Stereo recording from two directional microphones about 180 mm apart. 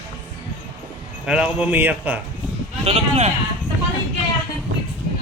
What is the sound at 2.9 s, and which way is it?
Speech, 40° right (ahead or behind).